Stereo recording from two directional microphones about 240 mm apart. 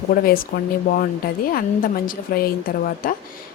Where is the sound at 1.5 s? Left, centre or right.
Left.